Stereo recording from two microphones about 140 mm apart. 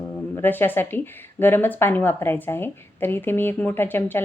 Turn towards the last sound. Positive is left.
turn(degrees=15)  # may be behind; listen again after turning